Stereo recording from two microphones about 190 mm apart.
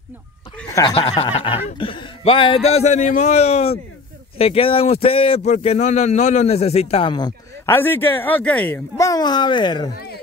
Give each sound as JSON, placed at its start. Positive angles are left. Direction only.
{"t": 0.7, "sound": "a man's voice", "side_deg": 25}